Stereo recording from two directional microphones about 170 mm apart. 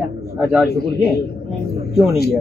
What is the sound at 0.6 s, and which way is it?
A man's voice, 70° left (ahead or behind).